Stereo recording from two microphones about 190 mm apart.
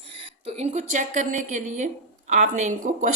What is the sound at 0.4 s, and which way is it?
A woman's voice, 35° right (ahead or behind).